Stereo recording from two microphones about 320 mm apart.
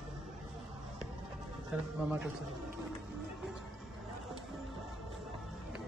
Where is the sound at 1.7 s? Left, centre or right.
Centre.